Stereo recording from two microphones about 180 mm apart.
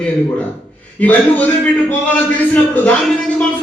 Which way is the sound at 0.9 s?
10° left (ahead or behind).